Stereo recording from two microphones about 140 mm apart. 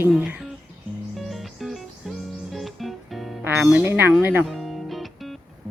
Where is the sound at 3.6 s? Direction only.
10° right (ahead or behind).